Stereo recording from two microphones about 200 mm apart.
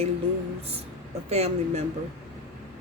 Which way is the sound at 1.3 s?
30° right (ahead or behind).